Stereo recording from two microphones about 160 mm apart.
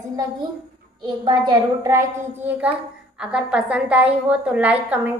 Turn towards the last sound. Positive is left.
turn(degrees=-10)  # may be behind; listen again after turning